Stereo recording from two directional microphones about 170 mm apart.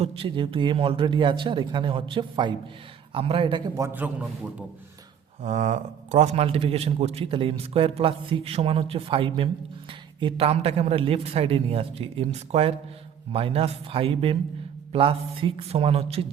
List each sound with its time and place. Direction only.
0.0 s a man's voice: 35° right (ahead or behind)
3.8 s a man's voice: 15° right (ahead or behind)
5.4 s a man's voice: 40° right (ahead or behind)